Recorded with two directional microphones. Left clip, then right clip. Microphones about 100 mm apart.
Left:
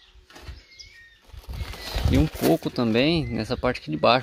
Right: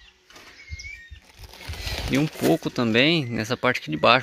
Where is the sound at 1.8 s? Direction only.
15° left (ahead or behind).